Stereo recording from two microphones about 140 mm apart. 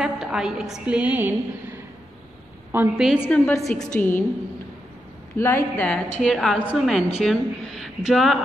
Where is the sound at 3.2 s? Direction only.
15° left (ahead or behind).